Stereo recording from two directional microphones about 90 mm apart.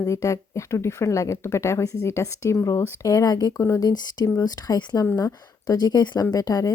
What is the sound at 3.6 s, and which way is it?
Speech, 30° left (ahead or behind).